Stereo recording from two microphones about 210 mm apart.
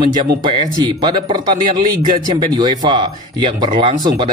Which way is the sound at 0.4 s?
20° right (ahead or behind).